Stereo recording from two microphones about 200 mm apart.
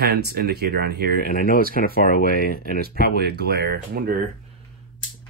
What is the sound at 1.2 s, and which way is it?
Speech, 45° left (ahead or behind).